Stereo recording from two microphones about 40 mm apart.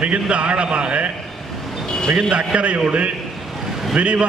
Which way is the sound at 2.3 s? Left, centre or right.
Right.